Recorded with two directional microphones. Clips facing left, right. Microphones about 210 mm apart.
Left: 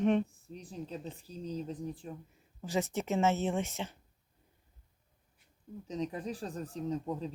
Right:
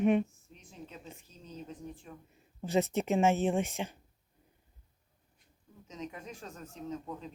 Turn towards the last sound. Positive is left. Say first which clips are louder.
# left 5 dB
turn(degrees=35)  # may be behind; listen again after turning